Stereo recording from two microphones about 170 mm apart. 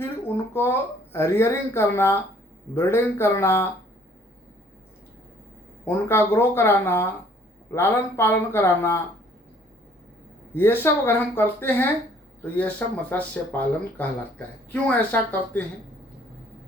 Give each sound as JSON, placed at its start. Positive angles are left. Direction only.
{"t": 0.5, "sound": "speech", "side_deg": 15}
{"t": 5.8, "sound": "speech", "side_deg": 15}
{"t": 10.5, "sound": "speech", "side_deg": 15}